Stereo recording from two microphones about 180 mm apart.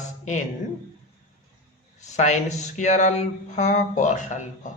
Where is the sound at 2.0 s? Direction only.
40° left (ahead or behind).